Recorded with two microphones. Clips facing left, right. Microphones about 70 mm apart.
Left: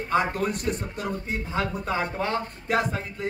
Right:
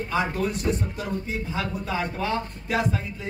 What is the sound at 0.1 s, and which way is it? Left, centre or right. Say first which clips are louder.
A man's voice: left 2 dB; left.